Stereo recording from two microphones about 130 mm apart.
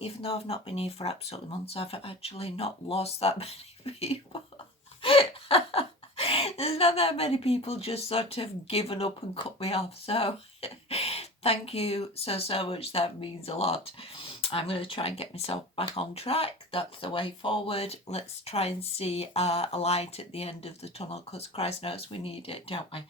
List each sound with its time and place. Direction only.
0.0 s speech: 50° left (ahead or behind)